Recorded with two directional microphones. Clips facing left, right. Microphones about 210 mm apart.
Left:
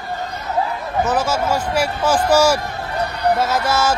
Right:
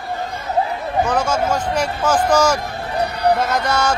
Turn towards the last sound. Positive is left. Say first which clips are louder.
# left 1 dB
turn(degrees=5)  # may be behind; listen again after turning